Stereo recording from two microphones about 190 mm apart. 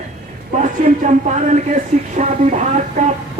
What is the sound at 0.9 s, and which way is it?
Speech, 40° right (ahead or behind).